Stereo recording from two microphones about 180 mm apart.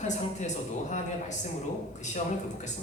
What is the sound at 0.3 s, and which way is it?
Speech, 40° left (ahead or behind).